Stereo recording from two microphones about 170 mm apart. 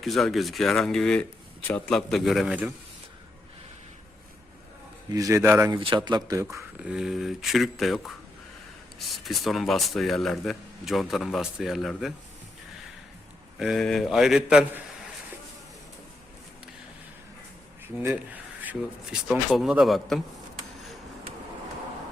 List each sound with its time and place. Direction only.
0.0 s speech: centre (ahead or behind)
5.1 s speech: 20° right (ahead or behind)
6.1 s speech: 25° right (ahead or behind)
6.8 s speech: 5° right (ahead or behind)
13.6 s speech: centre (ahead or behind)
17.9 s speech: 10° right (ahead or behind)